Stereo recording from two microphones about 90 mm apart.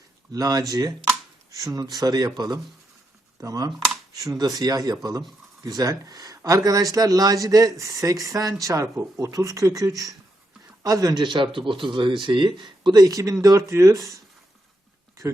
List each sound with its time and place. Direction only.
0.3 s speech: 40° right (ahead or behind)
11.2 s speech: 65° right (ahead or behind)
13.0 s speech: 40° right (ahead or behind)